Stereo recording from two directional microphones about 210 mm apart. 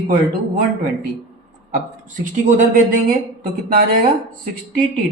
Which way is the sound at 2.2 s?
40° right (ahead or behind).